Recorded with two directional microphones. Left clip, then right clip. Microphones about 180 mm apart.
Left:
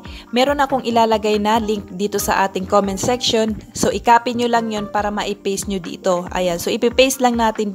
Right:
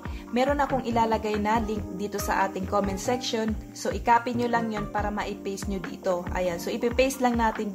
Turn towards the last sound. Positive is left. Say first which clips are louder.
# left 8 dB
turn(degrees=40)  # may be behind; listen again after turning